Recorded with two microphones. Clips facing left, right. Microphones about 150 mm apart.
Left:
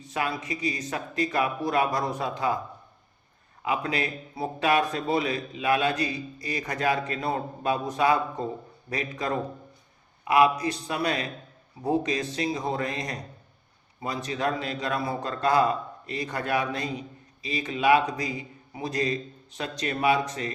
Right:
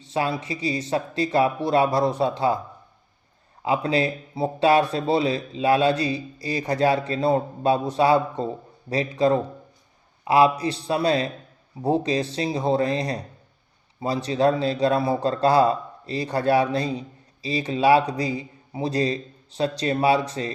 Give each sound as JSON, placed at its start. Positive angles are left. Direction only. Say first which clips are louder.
{"t": 0.0, "sound": "speech", "louder": "right 5 dB", "side_deg": -30}
{"t": 3.6, "sound": "speech", "louder": "right 6 dB", "side_deg": -30}